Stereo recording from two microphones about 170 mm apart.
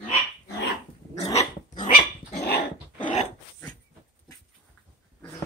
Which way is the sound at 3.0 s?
40° left (ahead or behind).